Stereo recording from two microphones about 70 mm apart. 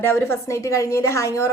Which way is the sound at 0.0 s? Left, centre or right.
Left.